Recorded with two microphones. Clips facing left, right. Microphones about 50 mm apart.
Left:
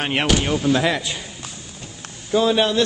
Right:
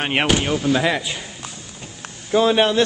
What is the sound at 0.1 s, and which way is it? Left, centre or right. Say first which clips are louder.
Speech: right 1 dB; right.